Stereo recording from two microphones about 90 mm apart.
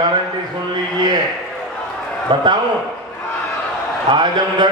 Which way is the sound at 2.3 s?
55° right (ahead or behind).